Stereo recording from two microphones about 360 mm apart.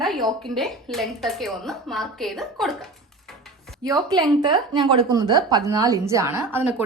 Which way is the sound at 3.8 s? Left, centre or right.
Centre.